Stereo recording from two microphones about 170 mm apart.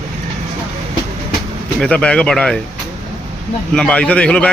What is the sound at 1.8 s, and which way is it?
Speech, 5° left (ahead or behind).